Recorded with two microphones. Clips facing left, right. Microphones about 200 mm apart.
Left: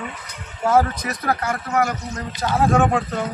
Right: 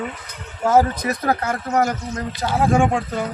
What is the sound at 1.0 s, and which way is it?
Speech, 30° right (ahead or behind).